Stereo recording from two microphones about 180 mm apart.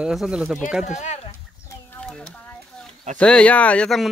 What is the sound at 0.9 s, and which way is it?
Speech, 40° left (ahead or behind).